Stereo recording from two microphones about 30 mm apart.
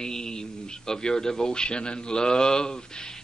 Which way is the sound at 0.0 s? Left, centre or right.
Left.